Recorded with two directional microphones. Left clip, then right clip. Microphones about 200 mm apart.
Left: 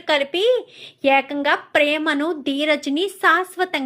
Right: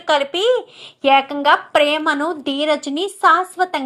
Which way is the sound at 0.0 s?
25° left (ahead or behind).